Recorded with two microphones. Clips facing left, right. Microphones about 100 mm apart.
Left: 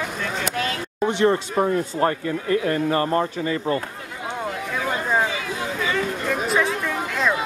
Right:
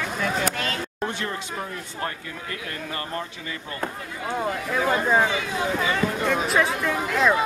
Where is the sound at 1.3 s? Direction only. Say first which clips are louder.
Left 11 dB; 40° left (ahead or behind).